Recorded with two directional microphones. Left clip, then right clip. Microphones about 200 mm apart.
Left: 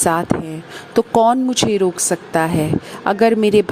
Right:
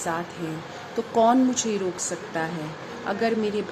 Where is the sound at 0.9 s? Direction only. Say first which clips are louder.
Left 7 dB; 50° left (ahead or behind).